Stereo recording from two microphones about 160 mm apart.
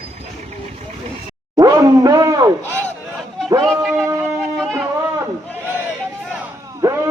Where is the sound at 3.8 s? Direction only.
Centre (ahead or behind).